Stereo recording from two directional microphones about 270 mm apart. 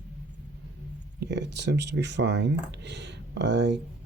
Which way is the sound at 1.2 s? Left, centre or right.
Right.